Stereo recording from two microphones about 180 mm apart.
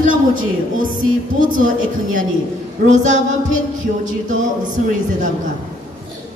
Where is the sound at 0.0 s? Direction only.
50° right (ahead or behind).